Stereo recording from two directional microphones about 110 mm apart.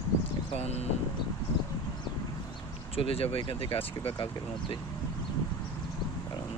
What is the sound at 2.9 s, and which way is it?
Speech, 60° left (ahead or behind).